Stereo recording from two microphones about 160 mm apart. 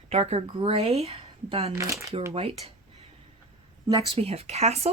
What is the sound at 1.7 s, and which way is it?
Speech, 20° right (ahead or behind).